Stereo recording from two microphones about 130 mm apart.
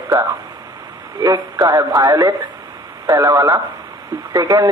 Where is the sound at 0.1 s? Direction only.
25° right (ahead or behind).